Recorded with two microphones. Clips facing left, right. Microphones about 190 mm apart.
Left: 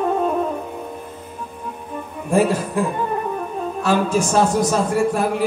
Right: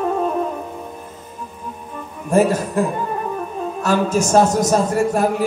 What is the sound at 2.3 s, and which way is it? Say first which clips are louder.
A man's voice: right 2 dB; 45° right (ahead or behind).